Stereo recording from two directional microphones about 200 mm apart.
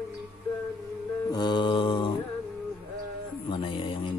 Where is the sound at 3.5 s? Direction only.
25° left (ahead or behind).